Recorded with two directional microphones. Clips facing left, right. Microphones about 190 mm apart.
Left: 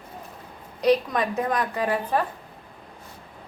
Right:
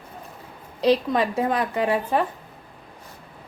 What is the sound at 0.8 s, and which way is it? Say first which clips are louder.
A woman's voice: right 1 dB; 30° right (ahead or behind).